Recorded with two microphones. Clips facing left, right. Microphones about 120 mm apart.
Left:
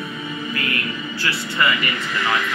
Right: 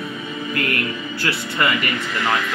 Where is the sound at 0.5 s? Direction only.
50° right (ahead or behind).